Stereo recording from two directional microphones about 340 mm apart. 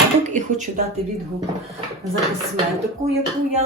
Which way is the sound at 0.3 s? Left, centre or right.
Right.